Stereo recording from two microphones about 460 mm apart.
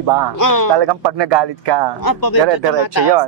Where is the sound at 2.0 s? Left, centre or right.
Left.